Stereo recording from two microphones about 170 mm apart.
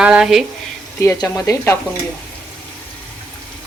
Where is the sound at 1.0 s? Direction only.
20° left (ahead or behind).